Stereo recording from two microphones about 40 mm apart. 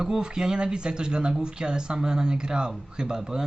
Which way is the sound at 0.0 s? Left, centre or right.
Centre.